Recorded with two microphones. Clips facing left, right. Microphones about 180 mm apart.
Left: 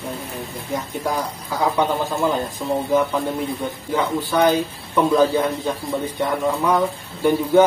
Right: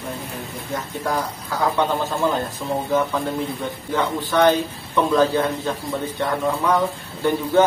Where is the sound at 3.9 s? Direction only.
10° left (ahead or behind).